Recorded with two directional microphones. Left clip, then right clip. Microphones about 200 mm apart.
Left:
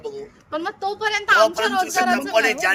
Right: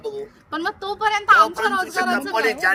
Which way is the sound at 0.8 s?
10° right (ahead or behind).